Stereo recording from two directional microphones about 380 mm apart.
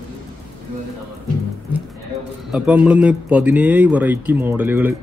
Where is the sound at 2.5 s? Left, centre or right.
Centre.